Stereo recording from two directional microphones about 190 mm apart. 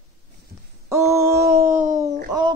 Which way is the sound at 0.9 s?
15° right (ahead or behind).